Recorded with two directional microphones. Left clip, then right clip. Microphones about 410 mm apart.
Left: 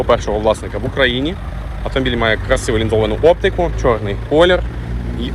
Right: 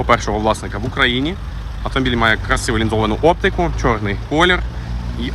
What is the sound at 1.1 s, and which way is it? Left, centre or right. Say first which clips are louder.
Speech: left 1 dB; right.